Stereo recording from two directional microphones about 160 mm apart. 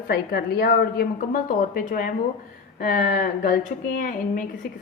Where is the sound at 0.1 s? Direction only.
75° left (ahead or behind).